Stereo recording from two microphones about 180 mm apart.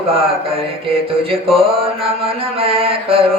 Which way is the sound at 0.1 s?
30° right (ahead or behind).